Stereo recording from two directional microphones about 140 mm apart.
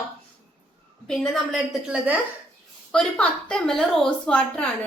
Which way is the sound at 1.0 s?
5° left (ahead or behind).